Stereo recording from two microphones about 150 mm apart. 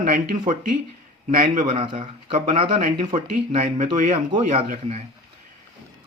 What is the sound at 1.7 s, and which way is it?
Speech, 40° right (ahead or behind).